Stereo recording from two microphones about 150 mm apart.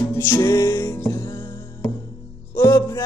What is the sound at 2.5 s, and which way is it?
Music, 20° left (ahead or behind).